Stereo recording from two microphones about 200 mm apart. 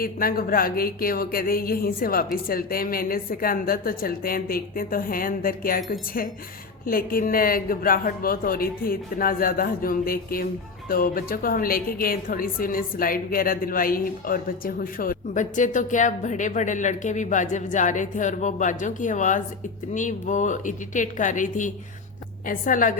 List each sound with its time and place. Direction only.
0.0 s a woman's voice: 45° left (ahead or behind)